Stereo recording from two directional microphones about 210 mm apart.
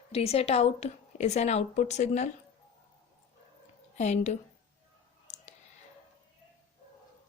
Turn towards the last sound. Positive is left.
turn(degrees=35)  # may be behind; listen again after turning